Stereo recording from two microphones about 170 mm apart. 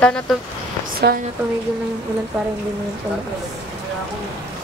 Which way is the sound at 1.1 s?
55° right (ahead or behind).